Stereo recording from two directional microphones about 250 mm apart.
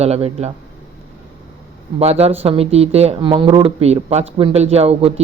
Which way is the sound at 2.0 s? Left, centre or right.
Right.